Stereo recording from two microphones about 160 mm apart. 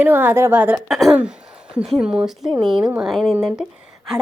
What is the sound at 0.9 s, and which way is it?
A woman's voice, centre (ahead or behind).